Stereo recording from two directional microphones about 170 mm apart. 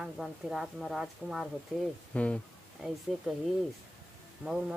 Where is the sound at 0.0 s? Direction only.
Centre (ahead or behind).